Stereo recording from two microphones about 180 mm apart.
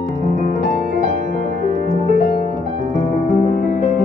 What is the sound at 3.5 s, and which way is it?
Music, 45° left (ahead or behind).